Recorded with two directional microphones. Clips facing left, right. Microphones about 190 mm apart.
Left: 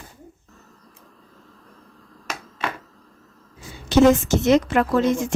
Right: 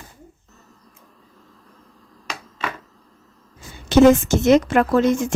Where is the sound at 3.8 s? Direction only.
55° right (ahead or behind).